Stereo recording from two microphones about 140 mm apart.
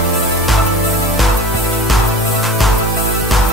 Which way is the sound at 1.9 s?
Centre (ahead or behind).